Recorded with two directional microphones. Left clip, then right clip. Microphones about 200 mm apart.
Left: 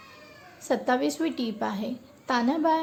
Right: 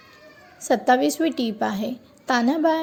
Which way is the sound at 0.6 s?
20° right (ahead or behind).